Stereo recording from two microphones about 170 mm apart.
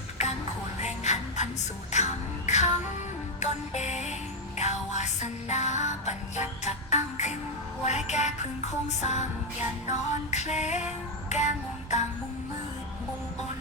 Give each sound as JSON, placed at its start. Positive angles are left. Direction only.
{"t": 0.8, "sound": "music", "side_deg": 40}